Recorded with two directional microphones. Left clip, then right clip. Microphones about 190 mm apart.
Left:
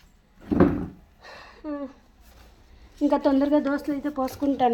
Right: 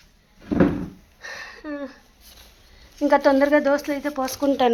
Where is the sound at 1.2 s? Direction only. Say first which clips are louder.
Right 5 dB; centre (ahead or behind).